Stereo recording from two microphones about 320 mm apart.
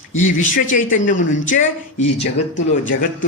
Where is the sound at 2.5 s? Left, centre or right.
Left.